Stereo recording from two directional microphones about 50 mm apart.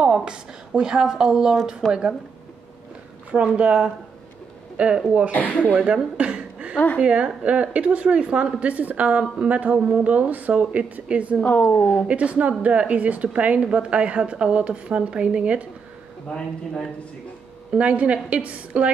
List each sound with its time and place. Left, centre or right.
0.0 s a woman's voice: centre
3.3 s a woman's voice: right
5.3 s speech: left
6.1 s chuckle: right
7.0 s a woman's voice: right
11.4 s speech: left
12.1 s a woman's voice: right
16.3 s a man's voice: left
17.7 s a woman's voice: right